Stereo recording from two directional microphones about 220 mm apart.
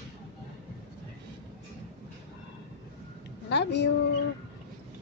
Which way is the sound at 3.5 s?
50° left (ahead or behind).